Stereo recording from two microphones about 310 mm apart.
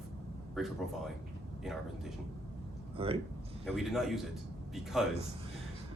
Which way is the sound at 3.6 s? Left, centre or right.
Centre.